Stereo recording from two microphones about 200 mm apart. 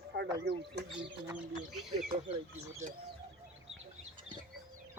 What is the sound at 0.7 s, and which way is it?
Speech, 55° right (ahead or behind).